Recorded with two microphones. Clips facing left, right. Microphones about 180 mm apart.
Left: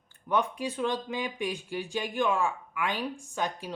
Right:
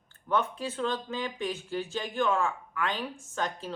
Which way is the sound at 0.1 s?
15° left (ahead or behind).